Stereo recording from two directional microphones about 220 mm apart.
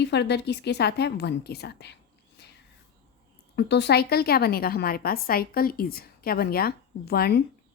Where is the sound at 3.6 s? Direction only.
50° left (ahead or behind).